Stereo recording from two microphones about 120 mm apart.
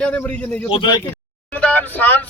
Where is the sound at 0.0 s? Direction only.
15° left (ahead or behind).